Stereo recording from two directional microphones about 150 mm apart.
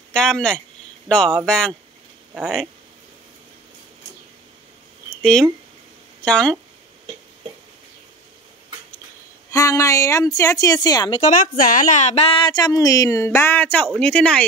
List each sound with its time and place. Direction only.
0.1 s speech: 5° left (ahead or behind)
5.1 s speech: 5° left (ahead or behind)
9.5 s a woman's voice: 20° left (ahead or behind)
11.1 s a woman's voice: 50° left (ahead or behind); by 14.4 s 5° left (ahead or behind)